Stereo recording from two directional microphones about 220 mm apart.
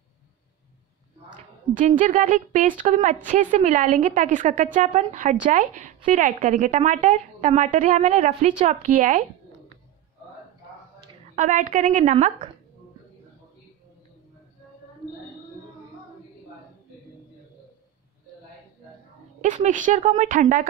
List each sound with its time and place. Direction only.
1.7 s a woman's voice: 35° right (ahead or behind)
11.3 s a woman's voice: 35° right (ahead or behind)
19.4 s a woman's voice: 35° right (ahead or behind)